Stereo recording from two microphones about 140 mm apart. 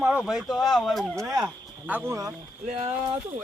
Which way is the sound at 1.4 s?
10° right (ahead or behind).